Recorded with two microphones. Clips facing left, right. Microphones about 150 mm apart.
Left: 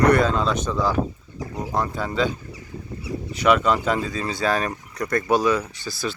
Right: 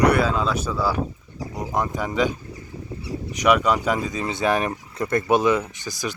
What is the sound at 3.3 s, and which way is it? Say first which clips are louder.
Speech: even; 10° right (ahead or behind).